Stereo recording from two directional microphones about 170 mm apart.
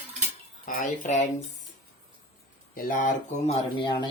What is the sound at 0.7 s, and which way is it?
Speech, 45° left (ahead or behind).